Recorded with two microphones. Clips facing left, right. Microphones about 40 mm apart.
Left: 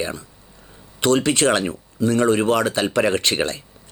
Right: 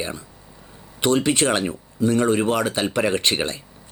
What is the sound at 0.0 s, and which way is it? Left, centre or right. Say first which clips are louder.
Speech: left 3 dB; right.